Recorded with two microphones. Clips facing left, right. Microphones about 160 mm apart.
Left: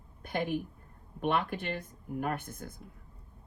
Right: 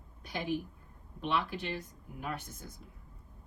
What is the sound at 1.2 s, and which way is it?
Speech, 50° left (ahead or behind).